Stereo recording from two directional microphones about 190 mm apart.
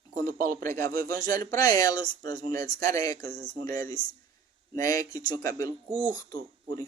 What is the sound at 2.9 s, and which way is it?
Speech, 20° left (ahead or behind).